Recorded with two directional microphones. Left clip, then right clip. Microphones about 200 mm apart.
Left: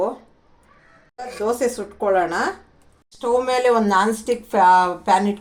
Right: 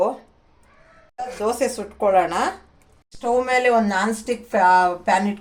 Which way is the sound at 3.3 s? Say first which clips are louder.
Even; 5° left (ahead or behind).